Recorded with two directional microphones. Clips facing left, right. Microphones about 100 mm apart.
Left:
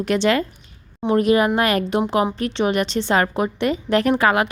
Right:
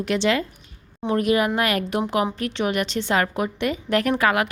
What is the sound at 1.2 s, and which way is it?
A woman's voice, 35° left (ahead or behind).